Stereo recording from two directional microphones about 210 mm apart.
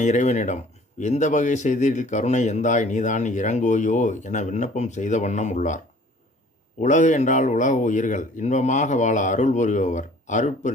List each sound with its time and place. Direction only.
0.0 s speech: 35° left (ahead or behind)